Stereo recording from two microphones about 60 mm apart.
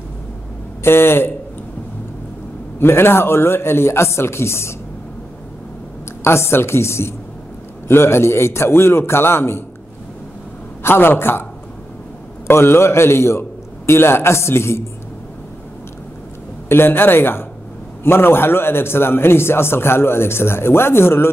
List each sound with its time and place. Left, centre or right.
0.8 s a man's voice: left
2.8 s a man's voice: left
6.2 s a man's voice: left
10.8 s a man's voice: left
12.4 s a man's voice: left
16.6 s a man's voice: left